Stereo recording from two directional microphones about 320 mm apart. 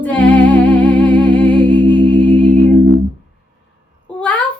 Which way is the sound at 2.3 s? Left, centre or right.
Centre.